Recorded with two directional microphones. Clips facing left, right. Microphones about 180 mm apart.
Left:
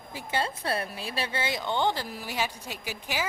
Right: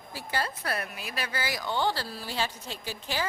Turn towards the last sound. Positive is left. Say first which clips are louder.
# even
turn(degrees=10)  # may be behind; listen again after turning